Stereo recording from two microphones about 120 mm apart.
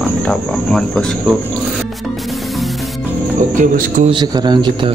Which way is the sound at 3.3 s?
90° right.